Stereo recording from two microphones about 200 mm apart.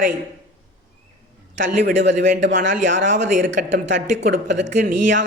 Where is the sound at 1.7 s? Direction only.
40° right (ahead or behind).